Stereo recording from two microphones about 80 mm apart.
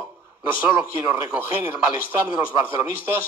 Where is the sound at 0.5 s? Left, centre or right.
Right.